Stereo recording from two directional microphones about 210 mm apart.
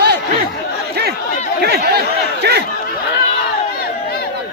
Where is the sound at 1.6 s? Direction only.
50° right (ahead or behind).